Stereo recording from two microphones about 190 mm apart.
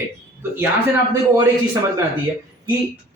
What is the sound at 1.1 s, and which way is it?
Speech, 15° right (ahead or behind).